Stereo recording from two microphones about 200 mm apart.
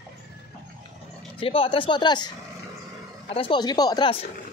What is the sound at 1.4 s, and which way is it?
Speech, 25° left (ahead or behind).